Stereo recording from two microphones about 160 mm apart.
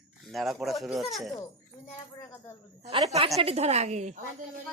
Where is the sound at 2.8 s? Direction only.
40° right (ahead or behind).